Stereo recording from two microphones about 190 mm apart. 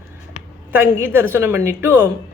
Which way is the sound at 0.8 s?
10° right (ahead or behind).